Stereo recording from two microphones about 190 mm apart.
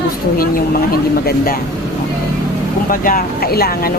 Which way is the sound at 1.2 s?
50° left (ahead or behind).